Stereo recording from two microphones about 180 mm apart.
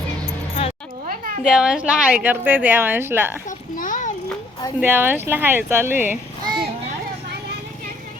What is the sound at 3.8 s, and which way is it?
Speech, 45° left (ahead or behind).